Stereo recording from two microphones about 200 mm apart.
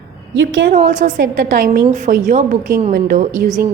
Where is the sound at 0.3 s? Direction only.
70° right (ahead or behind).